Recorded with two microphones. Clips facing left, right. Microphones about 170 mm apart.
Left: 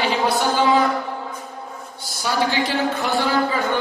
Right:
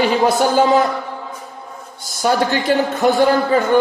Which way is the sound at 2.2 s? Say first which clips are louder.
Right 5 dB; 50° right (ahead or behind).